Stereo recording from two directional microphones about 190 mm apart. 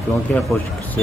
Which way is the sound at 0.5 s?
10° left (ahead or behind).